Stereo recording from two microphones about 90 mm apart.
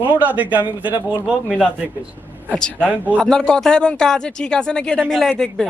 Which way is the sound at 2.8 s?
20° right (ahead or behind).